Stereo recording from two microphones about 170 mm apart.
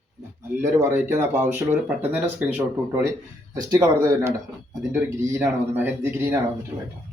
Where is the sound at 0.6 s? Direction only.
15° right (ahead or behind).